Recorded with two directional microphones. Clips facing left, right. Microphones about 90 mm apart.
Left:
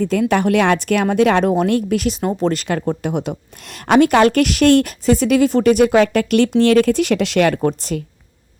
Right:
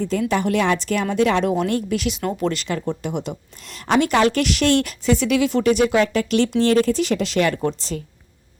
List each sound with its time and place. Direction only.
0.0 s a woman's voice: 55° left (ahead or behind); by 5.6 s 40° left (ahead or behind)
5.6 s a woman's voice: 55° left (ahead or behind)